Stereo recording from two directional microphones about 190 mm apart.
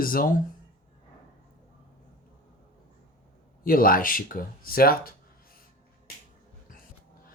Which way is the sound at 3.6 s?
50° left (ahead or behind).